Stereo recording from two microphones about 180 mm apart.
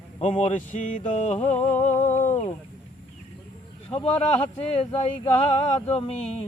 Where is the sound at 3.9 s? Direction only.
30° left (ahead or behind).